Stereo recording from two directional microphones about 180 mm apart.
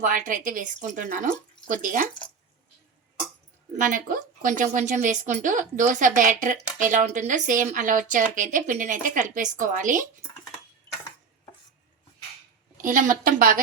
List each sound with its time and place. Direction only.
0.0 s a woman's voice: 45° right (ahead or behind)
3.8 s a woman's voice: 45° right (ahead or behind)
12.8 s a woman's voice: 45° right (ahead or behind)